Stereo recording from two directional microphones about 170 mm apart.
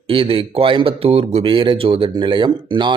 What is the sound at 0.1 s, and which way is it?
Speech, 30° right (ahead or behind).